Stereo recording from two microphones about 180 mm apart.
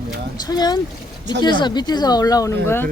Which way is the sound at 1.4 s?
25° left (ahead or behind).